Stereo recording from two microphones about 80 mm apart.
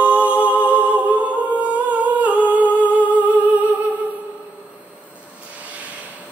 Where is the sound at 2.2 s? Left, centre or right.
Centre.